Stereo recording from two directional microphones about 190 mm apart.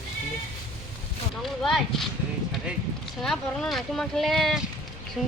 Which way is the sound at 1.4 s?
Centre (ahead or behind).